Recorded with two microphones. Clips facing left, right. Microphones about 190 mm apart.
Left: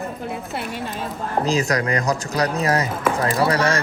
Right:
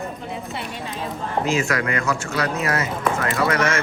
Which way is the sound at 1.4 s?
35° left (ahead or behind).